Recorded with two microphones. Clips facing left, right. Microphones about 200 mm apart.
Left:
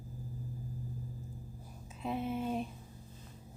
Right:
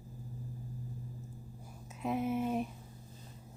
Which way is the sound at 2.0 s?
10° right (ahead or behind).